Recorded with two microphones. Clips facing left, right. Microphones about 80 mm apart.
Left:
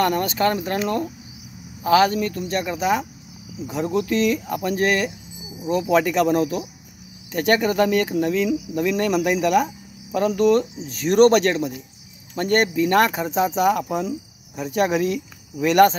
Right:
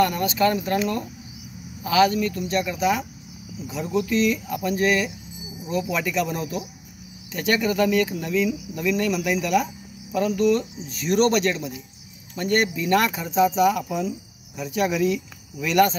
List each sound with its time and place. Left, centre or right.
0.0 s speech: left
3.6 s speech: left
7.3 s speech: left